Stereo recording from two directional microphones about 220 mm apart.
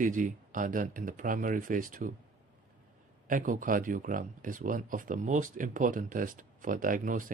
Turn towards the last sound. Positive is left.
turn(degrees=-40)  # may be behind; listen again after turning